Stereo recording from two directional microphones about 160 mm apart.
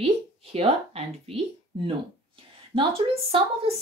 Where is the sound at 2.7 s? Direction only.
35° right (ahead or behind).